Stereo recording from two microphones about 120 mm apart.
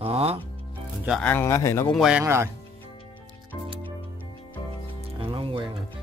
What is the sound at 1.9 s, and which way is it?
Speech, 5° right (ahead or behind).